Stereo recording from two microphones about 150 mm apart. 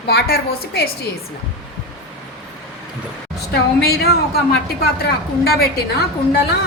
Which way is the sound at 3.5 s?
90° left.